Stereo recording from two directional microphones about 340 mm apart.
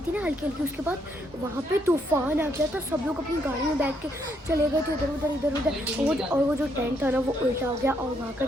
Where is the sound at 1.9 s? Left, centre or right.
Centre.